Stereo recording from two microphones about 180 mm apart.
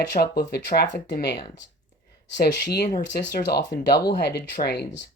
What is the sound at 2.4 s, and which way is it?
Speech, 65° left (ahead or behind).